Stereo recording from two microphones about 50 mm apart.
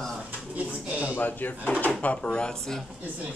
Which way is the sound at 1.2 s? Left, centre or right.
Left.